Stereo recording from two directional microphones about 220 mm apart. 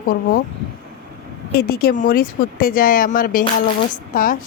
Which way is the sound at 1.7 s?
45° left (ahead or behind).